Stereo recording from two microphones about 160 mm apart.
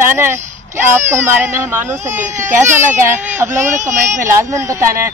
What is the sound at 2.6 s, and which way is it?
Speech, 15° right (ahead or behind).